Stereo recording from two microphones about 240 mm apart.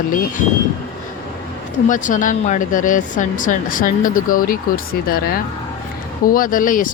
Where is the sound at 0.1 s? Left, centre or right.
Left.